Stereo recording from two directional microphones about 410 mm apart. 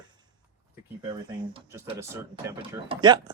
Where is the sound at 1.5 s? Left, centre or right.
Centre.